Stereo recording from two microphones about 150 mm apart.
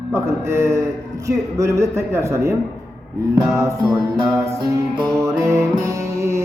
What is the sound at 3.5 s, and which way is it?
Music, 20° right (ahead or behind).